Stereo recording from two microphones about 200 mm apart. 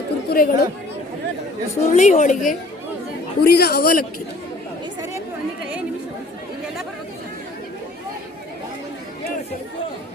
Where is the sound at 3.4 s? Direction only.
50° left (ahead or behind).